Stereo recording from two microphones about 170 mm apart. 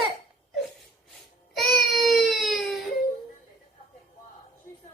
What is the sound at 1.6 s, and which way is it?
Baby cry, centre (ahead or behind).